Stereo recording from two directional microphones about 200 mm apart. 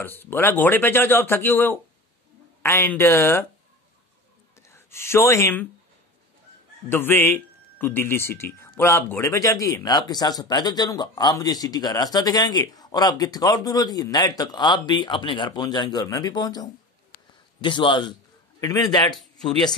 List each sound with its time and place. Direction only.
0.0 s speech: 10° left (ahead or behind)
4.6 s speech: 15° left (ahead or behind)
6.9 s a man's voice: 10° left (ahead or behind)
19.1 s speech: centre (ahead or behind)